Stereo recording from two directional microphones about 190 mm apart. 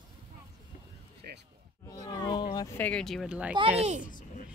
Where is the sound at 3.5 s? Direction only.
35° right (ahead or behind).